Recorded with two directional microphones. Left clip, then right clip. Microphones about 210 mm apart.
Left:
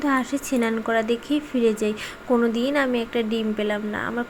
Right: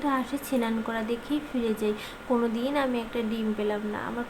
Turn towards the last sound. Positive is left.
turn(degrees=25)  # may be behind; listen again after turning